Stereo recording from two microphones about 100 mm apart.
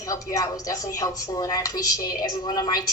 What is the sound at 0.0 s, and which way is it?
A woman's voice, 35° left (ahead or behind).